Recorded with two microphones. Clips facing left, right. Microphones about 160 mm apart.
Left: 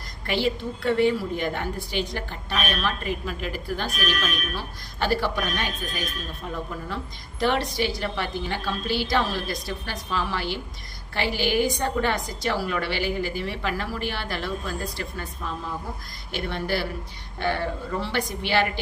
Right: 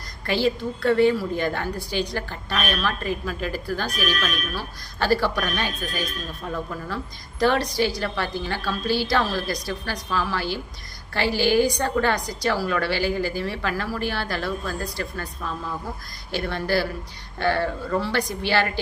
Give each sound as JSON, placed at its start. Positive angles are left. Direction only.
{"t": 0.3, "sound": "a woman's voice", "side_deg": 15}
{"t": 6.8, "sound": "a woman's voice", "side_deg": 20}
{"t": 16.3, "sound": "a woman's voice", "side_deg": 20}